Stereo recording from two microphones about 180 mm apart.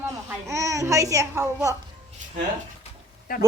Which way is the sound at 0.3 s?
15° right (ahead or behind).